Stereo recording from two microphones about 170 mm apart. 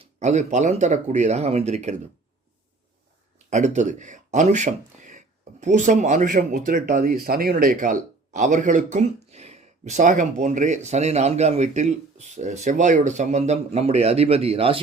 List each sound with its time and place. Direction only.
0.0 s speech: 45° right (ahead or behind)
3.3 s speech: 45° right (ahead or behind)